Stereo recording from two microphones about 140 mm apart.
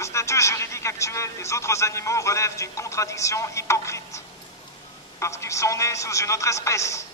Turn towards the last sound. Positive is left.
turn(degrees=20)  # may be behind; listen again after turning